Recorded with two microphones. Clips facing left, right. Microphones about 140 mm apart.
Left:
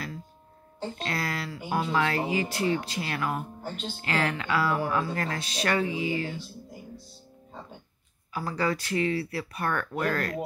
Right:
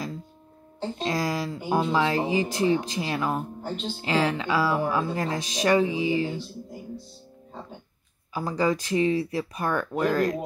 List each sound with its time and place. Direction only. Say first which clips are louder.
1.0 s speech: right 6 dB; 15° right (ahead or behind)
8.4 s speech: right 4 dB; 15° right (ahead or behind)